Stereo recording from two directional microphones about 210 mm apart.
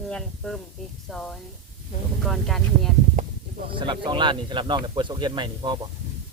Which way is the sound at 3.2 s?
35° right (ahead or behind).